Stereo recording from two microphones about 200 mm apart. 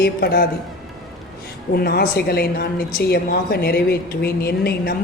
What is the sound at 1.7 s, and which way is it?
A woman's voice, 50° left (ahead or behind).